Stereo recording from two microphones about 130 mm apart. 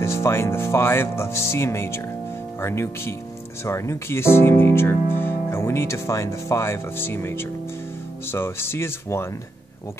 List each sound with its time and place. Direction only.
0.0 s speech: 20° left (ahead or behind)